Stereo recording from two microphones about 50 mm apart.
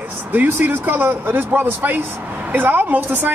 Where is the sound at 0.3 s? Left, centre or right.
Right.